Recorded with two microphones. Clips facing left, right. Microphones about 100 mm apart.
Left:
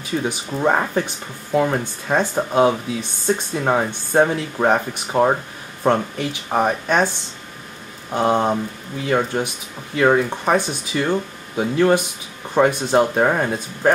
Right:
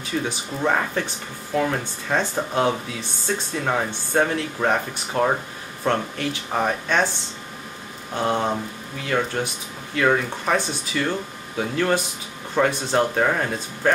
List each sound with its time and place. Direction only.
0.2 s speech: 20° left (ahead or behind)
8.1 s speech: 15° left (ahead or behind)